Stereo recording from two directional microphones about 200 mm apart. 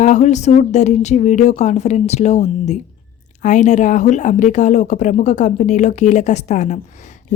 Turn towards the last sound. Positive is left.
turn(degrees=35)  # may be behind; listen again after turning